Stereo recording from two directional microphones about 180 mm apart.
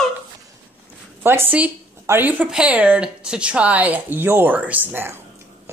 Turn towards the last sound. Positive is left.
turn(degrees=-10)  # may be behind; listen again after turning